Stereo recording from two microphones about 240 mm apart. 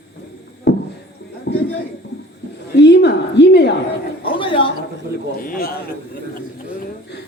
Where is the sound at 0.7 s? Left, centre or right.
Left.